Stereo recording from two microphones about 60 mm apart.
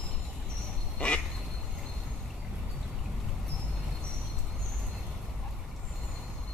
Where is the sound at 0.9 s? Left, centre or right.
Centre.